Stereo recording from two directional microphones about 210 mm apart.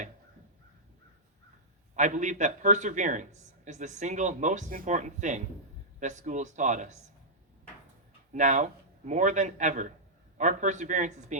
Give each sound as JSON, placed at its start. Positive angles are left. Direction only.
{"t": 2.0, "sound": "speech", "side_deg": -35}
{"t": 8.3, "sound": "a man's voice", "side_deg": -35}